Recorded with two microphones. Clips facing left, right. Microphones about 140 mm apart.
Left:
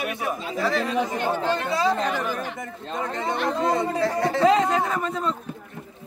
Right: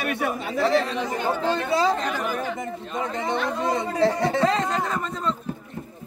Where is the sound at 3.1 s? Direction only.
20° right (ahead or behind).